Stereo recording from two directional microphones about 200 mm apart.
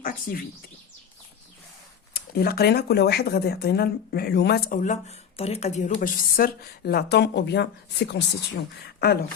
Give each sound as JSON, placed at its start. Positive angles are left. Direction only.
{"t": 0.0, "sound": "speech", "side_deg": 45}
{"t": 2.1, "sound": "speech", "side_deg": 50}